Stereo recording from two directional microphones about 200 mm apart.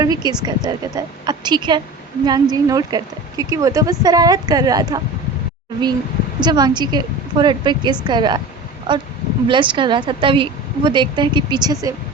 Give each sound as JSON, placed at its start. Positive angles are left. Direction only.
{"t": 0.0, "sound": "speech", "side_deg": -20}
{"t": 6.4, "sound": "speech", "side_deg": -20}